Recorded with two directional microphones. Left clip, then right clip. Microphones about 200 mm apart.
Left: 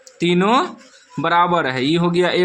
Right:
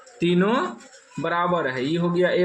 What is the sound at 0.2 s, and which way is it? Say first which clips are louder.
A man's voice: left 5 dB; 30° left (ahead or behind).